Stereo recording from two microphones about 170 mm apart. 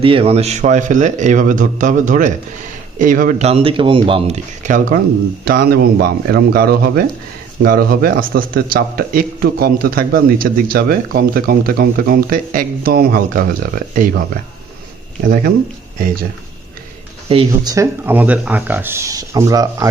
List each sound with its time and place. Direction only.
0.0 s a man's voice: 30° right (ahead or behind); by 3.4 s 50° right (ahead or behind)
3.4 s speech: 35° right (ahead or behind)
4.6 s a man's voice: 50° right (ahead or behind)
5.5 s speech: 60° right (ahead or behind)
17.2 s speech: 35° right (ahead or behind)
17.7 s speech: 15° right (ahead or behind)